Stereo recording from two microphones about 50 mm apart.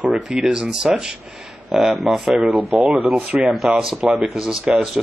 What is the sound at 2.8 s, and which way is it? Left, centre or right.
Speech, right.